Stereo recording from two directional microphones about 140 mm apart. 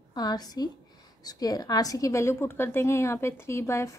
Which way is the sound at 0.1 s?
30° left (ahead or behind).